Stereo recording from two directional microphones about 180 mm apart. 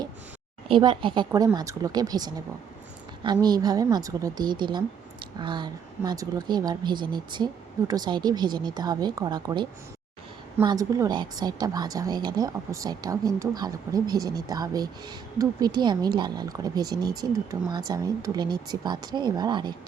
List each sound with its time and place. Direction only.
0.7 s speech: 25° right (ahead or behind)
3.4 s speech: 20° right (ahead or behind)